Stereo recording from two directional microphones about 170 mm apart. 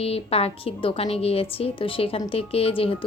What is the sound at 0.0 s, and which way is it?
A woman's voice, 35° left (ahead or behind).